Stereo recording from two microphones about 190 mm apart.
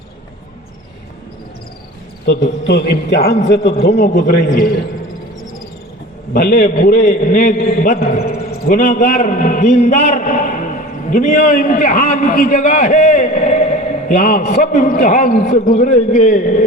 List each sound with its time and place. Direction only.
2.6 s a man's voice: 60° left (ahead or behind)
6.3 s a man's voice: 50° left (ahead or behind)
8.2 s a man's voice: 50° left (ahead or behind)